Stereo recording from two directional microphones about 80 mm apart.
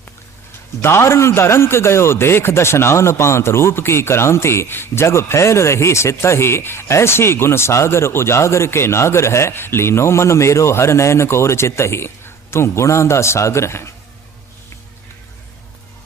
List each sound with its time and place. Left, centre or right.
0.8 s a man's voice: left